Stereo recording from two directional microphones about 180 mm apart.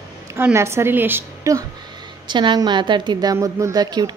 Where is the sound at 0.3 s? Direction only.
15° right (ahead or behind).